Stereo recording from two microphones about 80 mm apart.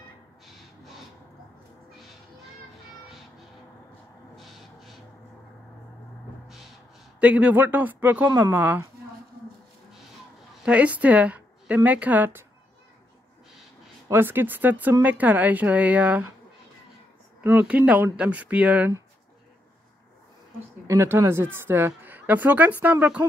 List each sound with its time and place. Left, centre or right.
4.4 s a sound: centre
6.4 s crow: centre
7.2 s speech: centre
10.6 s a woman's voice: centre
14.1 s speech: right
17.4 s speech: right
17.6 s speech: centre
20.8 s speech: right
21.3 s speech: right